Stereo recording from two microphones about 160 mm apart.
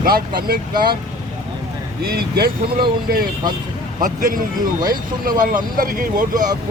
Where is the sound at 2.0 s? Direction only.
70° right (ahead or behind).